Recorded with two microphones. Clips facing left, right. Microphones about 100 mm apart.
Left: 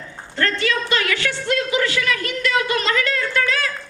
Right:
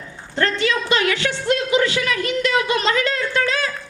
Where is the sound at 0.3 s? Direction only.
20° right (ahead or behind).